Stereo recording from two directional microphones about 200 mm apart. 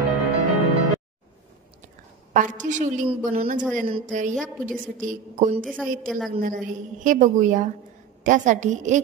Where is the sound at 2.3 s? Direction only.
40° right (ahead or behind).